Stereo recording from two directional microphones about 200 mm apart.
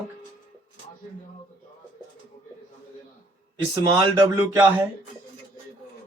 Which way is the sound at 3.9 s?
20° right (ahead or behind).